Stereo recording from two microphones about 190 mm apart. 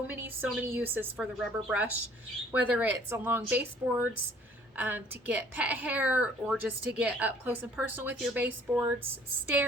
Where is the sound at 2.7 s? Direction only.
10° right (ahead or behind).